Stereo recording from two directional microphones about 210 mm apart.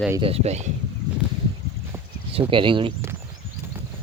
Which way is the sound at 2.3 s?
25° right (ahead or behind).